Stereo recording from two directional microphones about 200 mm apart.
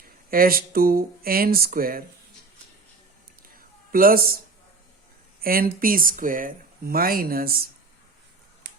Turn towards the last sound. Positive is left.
turn(degrees=-45)  # may be behind; listen again after turning